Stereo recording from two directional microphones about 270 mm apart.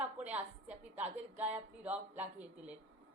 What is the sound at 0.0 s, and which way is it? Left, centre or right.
A woman's voice, centre.